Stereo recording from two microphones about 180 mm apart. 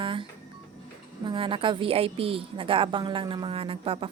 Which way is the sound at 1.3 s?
30° right (ahead or behind).